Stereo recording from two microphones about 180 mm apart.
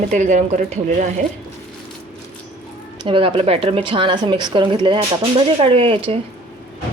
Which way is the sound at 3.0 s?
30° right (ahead or behind).